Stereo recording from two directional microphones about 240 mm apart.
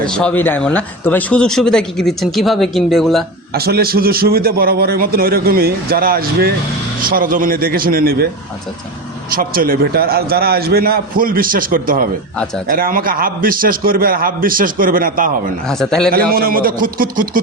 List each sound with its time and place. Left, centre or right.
0.1 s speech: centre
3.5 s a man's voice: right
9.3 s a man's voice: right
15.6 s speech: centre
16.3 s a man's voice: right